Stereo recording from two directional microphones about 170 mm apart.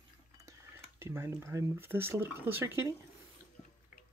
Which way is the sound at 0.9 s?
15° right (ahead or behind).